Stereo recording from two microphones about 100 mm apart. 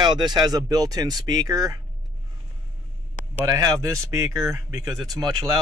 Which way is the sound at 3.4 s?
35° right (ahead or behind).